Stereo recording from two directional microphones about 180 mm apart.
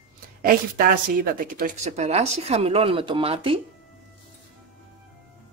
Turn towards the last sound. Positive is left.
turn(degrees=-30)  # may be behind; listen again after turning